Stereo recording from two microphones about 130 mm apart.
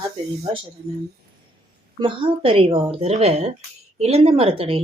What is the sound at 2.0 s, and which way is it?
Speech, 40° right (ahead or behind).